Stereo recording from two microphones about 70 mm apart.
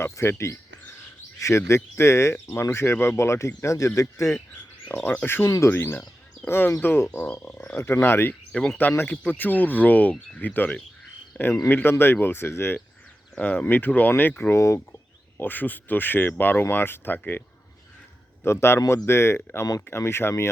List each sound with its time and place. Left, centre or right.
0.0 s bird: left
1.4 s speech: left
4.5 s speech: left
5.5 s speech: left
5.7 s speech: left
11.3 s cricket: left
11.7 s speech: left
13.3 s speech: left
14.5 s speech: left
15.4 s speech: left
18.4 s speech: left